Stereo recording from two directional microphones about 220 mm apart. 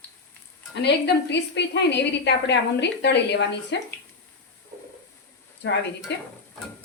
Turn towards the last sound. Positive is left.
turn(degrees=50)  # may be behind; listen again after turning